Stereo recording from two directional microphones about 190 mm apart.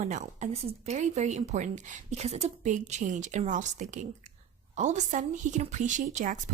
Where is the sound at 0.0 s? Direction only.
40° right (ahead or behind).